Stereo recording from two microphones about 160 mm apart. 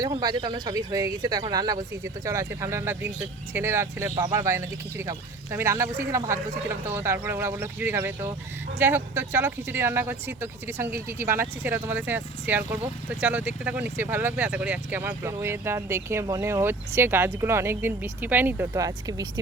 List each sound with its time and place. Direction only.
0.2 s speech: 25° right (ahead or behind)